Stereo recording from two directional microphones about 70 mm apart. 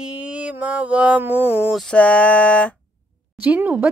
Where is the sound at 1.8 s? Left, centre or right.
Centre.